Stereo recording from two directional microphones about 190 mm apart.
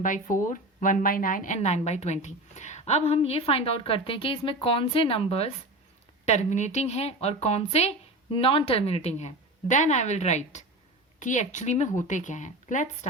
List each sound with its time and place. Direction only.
0.0 s speech: 45° left (ahead or behind)